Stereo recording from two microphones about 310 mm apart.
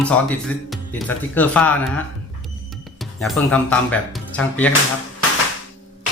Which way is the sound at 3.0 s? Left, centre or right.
Centre.